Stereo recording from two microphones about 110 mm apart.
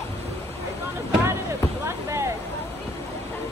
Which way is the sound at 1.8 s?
25° right (ahead or behind).